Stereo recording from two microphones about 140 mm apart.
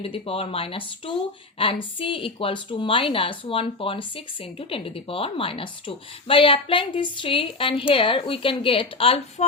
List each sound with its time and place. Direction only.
0.0 s a woman's voice: 40° left (ahead or behind)